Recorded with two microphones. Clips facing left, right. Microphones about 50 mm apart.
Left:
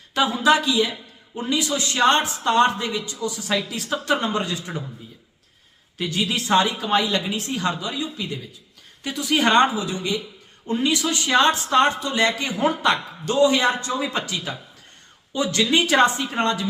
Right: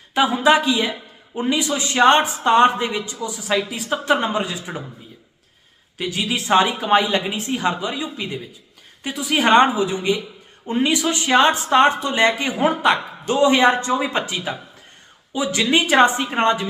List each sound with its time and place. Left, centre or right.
0.1 s a man's voice: centre
6.0 s a man's voice: centre; by 8.4 s right
9.0 s a man's voice: centre; by 16.6 s right